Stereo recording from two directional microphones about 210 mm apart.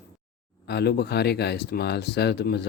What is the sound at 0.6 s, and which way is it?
Speech, 50° left (ahead or behind).